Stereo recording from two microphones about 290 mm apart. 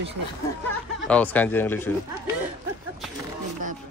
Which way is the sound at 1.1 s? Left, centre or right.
Centre.